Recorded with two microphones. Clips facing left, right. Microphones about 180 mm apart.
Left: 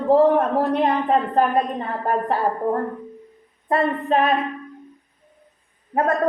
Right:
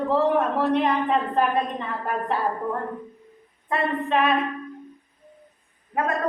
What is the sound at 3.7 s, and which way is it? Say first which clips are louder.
Speech: left 4 dB; 40° left (ahead or behind).